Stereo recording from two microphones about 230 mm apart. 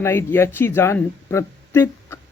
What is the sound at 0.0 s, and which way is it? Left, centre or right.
Speech, centre.